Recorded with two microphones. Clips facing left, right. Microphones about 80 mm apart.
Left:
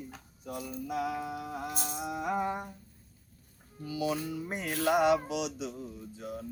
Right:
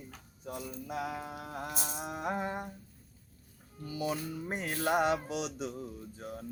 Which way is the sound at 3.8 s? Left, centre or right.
Right.